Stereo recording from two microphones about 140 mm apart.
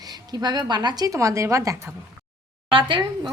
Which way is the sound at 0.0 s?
30° right (ahead or behind).